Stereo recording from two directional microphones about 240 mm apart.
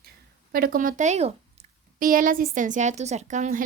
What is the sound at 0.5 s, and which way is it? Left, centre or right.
Speech, right.